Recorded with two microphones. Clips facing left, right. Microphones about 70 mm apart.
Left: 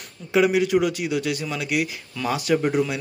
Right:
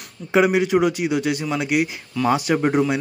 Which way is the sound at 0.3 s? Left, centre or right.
Right.